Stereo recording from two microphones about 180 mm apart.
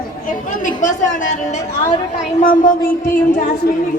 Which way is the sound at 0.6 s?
45° left (ahead or behind).